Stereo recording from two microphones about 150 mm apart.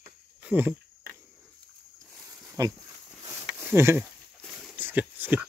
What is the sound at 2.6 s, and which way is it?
Speech, 25° right (ahead or behind).